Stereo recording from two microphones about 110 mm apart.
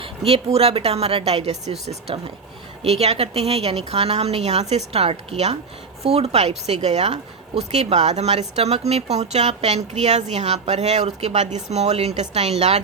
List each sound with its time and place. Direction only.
0.0 s a woman's voice: 60° right (ahead or behind); by 12.8 s 85° right